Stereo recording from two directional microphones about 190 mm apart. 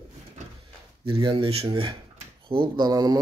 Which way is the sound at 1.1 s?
25° right (ahead or behind).